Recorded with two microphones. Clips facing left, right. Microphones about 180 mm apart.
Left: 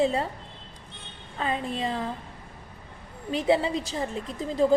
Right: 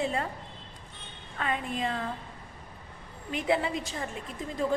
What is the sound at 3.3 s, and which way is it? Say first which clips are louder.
A woman's voice: left 5 dB; 30° left (ahead or behind).